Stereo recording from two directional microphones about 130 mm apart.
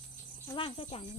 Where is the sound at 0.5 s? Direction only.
40° left (ahead or behind).